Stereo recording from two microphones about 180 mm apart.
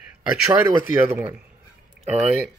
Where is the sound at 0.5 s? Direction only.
15° right (ahead or behind).